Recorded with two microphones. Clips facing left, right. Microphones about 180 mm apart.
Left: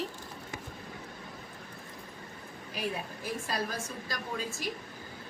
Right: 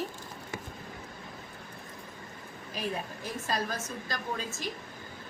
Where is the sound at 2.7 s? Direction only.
10° left (ahead or behind).